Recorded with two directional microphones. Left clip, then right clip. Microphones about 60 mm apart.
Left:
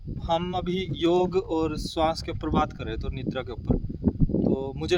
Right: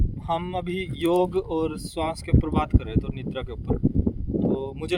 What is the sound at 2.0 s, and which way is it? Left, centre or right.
Speech, left.